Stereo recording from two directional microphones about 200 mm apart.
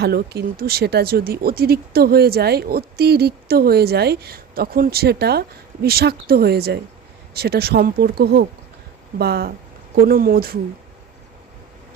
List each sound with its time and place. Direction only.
0.0 s speech: 50° right (ahead or behind)